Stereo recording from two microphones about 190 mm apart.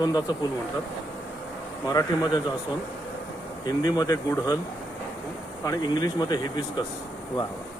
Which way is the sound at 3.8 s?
20° left (ahead or behind).